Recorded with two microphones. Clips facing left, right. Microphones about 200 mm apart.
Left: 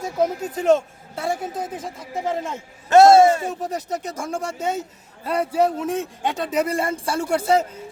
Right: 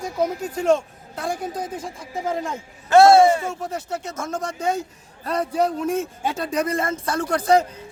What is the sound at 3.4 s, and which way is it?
Speech, 35° left (ahead or behind).